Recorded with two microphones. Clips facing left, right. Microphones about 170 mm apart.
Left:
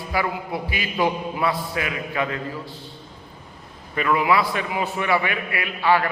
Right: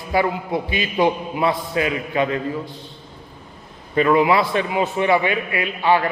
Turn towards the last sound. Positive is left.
turn(degrees=-20)  # may be behind; listen again after turning